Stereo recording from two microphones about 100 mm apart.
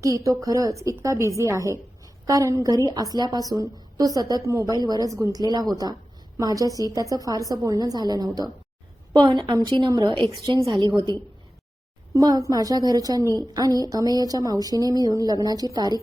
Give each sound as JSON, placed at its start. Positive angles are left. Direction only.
{"t": 0.0, "sound": "a woman's voice", "side_deg": -35}
{"t": 10.8, "sound": "a woman's voice", "side_deg": -40}